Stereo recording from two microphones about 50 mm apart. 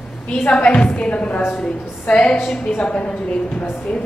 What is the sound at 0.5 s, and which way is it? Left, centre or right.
A woman's voice, left.